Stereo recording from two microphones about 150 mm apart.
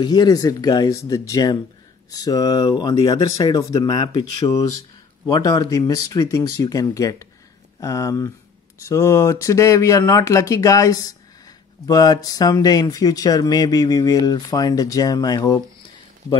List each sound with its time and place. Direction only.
0.0 s speech: 25° left (ahead or behind)